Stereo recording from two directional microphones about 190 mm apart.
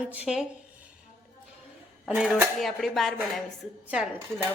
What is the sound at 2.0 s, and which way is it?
A woman's voice, 5° right (ahead or behind).